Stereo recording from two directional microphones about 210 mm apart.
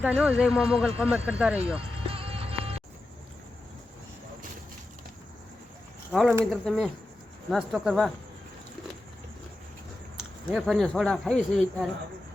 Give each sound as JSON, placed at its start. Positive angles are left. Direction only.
{"t": 0.0, "sound": "speech", "side_deg": -5}
{"t": 1.7, "sound": "music", "side_deg": -25}
{"t": 6.1, "sound": "speech", "side_deg": 0}
{"t": 10.5, "sound": "speech", "side_deg": 0}